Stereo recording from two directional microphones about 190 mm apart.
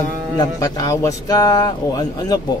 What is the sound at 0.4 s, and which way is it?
Speech, 20° left (ahead or behind).